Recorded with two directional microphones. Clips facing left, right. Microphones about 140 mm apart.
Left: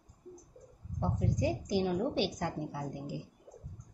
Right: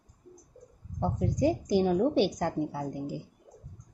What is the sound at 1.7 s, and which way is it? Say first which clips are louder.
Speech: right 6 dB; 45° right (ahead or behind).